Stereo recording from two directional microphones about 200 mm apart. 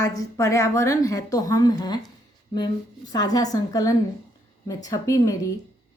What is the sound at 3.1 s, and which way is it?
A woman's voice, 20° left (ahead or behind).